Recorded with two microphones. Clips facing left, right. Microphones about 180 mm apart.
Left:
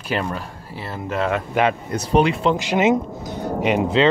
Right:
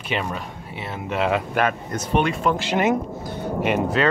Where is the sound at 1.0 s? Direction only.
15° right (ahead or behind).